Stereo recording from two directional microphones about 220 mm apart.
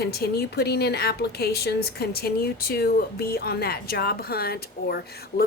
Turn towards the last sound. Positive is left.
turn(degrees=45)  # may be behind; listen again after turning